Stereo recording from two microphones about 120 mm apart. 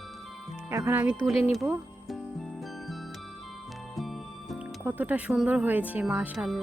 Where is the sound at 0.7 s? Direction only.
20° right (ahead or behind).